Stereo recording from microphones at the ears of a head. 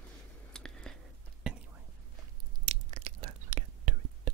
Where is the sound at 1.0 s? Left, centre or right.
Right.